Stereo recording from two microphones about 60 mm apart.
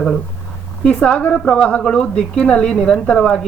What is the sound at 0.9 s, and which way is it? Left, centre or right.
Speech, left.